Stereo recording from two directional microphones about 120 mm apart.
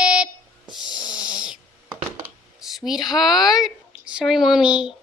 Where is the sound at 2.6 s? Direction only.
5° right (ahead or behind).